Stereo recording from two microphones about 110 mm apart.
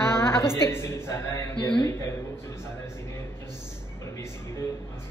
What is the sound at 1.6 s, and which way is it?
Speech, 40° left (ahead or behind).